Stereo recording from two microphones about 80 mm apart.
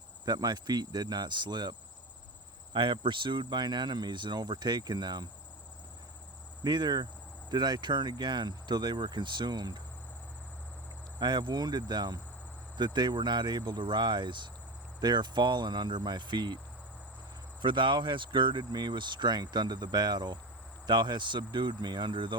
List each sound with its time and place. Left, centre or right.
0.3 s speech: right
2.7 s speech: right
6.7 s speech: right
11.2 s speech: right
17.6 s speech: right